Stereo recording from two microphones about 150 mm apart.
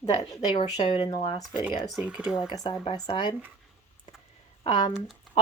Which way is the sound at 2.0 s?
5° right (ahead or behind).